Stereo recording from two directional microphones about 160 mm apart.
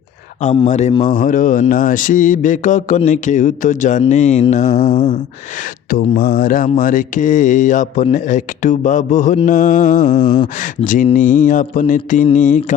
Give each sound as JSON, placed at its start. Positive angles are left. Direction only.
{"t": 0.7, "sound": "speech", "side_deg": 45}
{"t": 1.2, "sound": "speech", "side_deg": 60}
{"t": 6.1, "sound": "speech", "side_deg": 60}
{"t": 10.2, "sound": "a sound", "side_deg": 30}
{"t": 10.8, "sound": "speech", "side_deg": 55}